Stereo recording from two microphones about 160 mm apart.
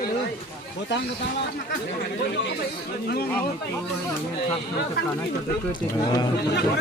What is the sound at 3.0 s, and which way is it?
Speech, 80° left.